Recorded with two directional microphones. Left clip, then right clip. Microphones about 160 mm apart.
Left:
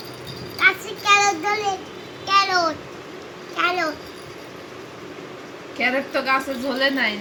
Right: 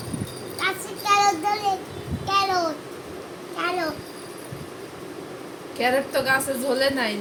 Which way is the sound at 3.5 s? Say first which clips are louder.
Left 5 dB; 10° left (ahead or behind).